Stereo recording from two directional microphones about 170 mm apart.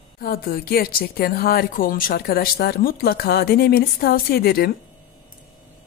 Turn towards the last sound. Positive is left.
turn(degrees=65)  # may be behind; listen again after turning